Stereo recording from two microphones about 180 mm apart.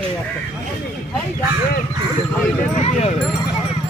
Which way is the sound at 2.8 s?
35° left (ahead or behind).